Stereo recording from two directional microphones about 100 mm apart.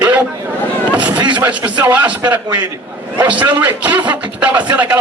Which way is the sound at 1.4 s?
15° right (ahead or behind).